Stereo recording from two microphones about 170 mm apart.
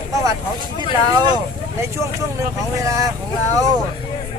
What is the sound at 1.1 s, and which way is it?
Speech, 25° right (ahead or behind).